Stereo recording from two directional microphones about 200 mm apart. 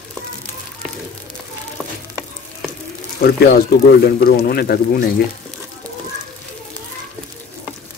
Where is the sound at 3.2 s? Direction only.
50° left (ahead or behind).